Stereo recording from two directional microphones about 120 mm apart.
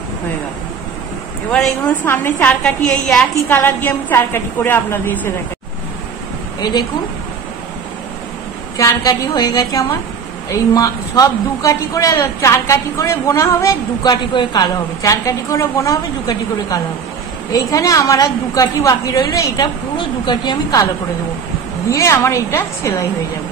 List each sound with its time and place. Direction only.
2.0 s a woman's voice: 15° left (ahead or behind)
3.1 s a woman's voice: centre (ahead or behind)
3.4 s a woman's voice: 15° left (ahead or behind)
8.7 s a woman's voice: 30° left (ahead or behind)
21.8 s a man's voice: 25° left (ahead or behind)